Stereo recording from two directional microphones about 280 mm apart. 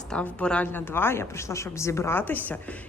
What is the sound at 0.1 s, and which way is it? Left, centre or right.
Speech, centre.